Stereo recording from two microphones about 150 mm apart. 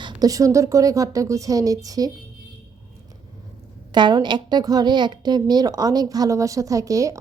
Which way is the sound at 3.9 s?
30° right (ahead or behind).